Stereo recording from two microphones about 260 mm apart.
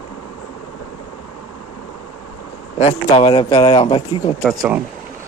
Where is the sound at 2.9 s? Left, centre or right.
Centre.